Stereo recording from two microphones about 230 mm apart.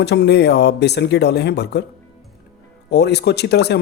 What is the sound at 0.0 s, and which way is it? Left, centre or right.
Speech, left.